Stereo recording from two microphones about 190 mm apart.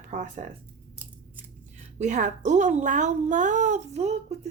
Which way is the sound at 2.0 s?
40° right (ahead or behind).